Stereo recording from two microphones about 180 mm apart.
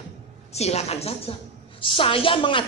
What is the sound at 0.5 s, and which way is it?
A woman's voice, 35° left (ahead or behind).